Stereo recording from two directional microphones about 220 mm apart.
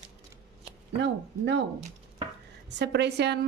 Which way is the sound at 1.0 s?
50° right (ahead or behind).